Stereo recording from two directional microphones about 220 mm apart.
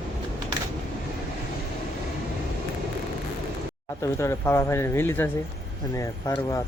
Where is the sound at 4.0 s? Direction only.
15° left (ahead or behind).